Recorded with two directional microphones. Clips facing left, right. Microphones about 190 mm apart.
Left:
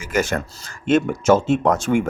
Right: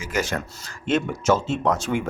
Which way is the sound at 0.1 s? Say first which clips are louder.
Left 5 dB; 50° left (ahead or behind).